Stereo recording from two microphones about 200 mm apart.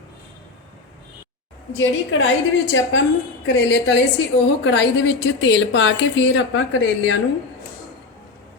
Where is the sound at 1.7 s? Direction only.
75° left (ahead or behind).